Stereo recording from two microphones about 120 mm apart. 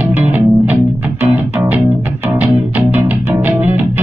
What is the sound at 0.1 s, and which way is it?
Music, 15° right (ahead or behind).